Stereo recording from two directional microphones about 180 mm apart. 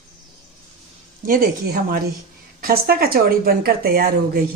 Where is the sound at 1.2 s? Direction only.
50° right (ahead or behind).